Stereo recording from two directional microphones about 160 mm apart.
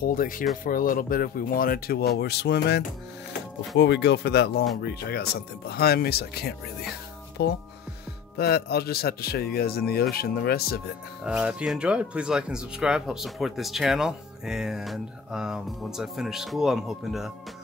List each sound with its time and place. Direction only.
0.0 s speech: 60° left (ahead or behind); by 4.6 s 90° left
4.8 s speech: 80° left
7.4 s speech: 90° left; by 10.8 s 75° left (ahead or behind)
11.2 s speech: 5° right (ahead or behind)